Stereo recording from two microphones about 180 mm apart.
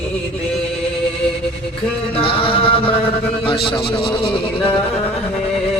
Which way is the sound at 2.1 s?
30° left (ahead or behind).